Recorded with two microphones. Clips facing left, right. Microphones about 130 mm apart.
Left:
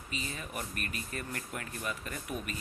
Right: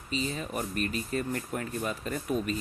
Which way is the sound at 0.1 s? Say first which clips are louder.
Right 8 dB; 30° right (ahead or behind).